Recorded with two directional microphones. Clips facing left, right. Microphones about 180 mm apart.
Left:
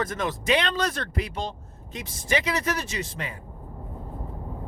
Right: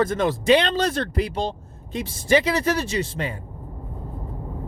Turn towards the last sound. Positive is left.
turn(degrees=-30)  # may be behind; listen again after turning